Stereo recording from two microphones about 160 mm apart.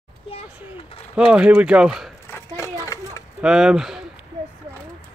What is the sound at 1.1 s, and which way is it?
Speech, 5° right (ahead or behind).